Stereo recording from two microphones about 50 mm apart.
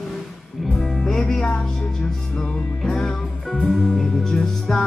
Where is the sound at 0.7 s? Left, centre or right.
Centre.